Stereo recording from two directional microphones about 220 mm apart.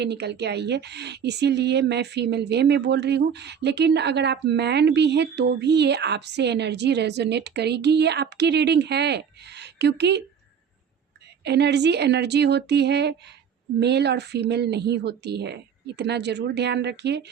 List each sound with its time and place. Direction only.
0.0 s speech: 50° right (ahead or behind)
11.4 s speech: 50° right (ahead or behind)